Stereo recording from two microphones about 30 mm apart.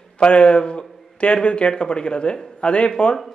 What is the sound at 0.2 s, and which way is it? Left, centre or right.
A man's voice, left.